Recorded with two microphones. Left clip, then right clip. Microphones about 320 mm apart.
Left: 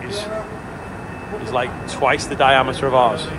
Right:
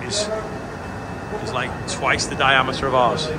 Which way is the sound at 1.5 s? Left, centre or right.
Centre.